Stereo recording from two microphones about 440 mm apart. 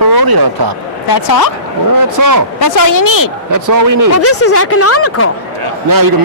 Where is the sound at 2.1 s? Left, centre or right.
Right.